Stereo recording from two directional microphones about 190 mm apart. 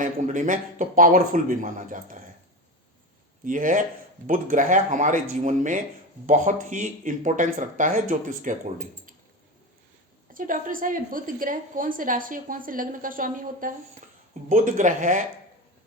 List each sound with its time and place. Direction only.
0.0 s a woman's voice: 40° right (ahead or behind)
3.4 s a woman's voice: 45° right (ahead or behind)
10.3 s a woman's voice: 45° right (ahead or behind)